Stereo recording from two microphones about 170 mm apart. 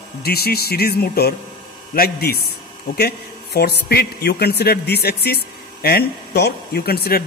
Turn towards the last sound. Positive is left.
turn(degrees=65)  # may be behind; listen again after turning